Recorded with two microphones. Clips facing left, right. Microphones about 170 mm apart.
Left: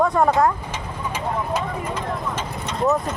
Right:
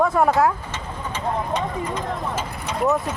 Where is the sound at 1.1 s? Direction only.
5° left (ahead or behind).